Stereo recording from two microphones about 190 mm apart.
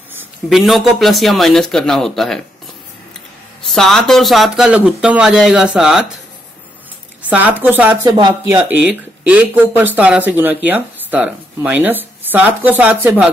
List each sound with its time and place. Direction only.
0.5 s speech: centre (ahead or behind)
3.6 s speech: centre (ahead or behind)
7.2 s speech: 10° right (ahead or behind)
8.1 s speech: 20° right (ahead or behind)
8.5 s speech: 10° right (ahead or behind)